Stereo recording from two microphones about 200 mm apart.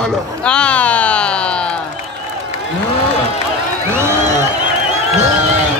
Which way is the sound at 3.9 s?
15° right (ahead or behind).